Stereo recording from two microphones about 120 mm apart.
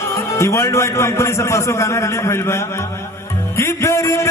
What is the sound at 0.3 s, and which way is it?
A man's voice, 25° left (ahead or behind).